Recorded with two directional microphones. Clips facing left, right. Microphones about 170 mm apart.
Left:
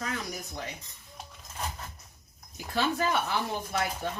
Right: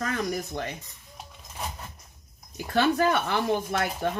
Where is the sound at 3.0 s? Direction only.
55° right (ahead or behind).